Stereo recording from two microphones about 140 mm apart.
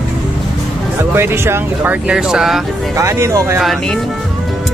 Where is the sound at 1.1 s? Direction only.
15° right (ahead or behind).